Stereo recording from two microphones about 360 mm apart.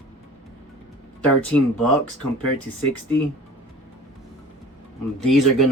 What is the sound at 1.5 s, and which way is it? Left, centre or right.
Speech, centre.